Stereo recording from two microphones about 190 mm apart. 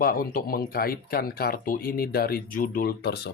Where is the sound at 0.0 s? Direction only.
50° left (ahead or behind).